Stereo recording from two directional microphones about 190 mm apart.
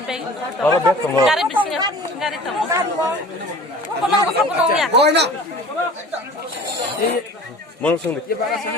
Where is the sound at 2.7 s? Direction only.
15° right (ahead or behind).